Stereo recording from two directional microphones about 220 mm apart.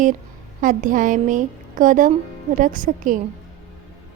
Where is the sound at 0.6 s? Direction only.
35° right (ahead or behind).